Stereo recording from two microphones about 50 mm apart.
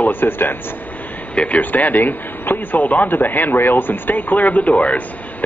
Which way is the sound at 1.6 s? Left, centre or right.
Left.